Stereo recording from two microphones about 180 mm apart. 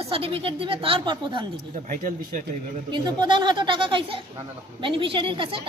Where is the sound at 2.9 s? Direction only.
25° right (ahead or behind).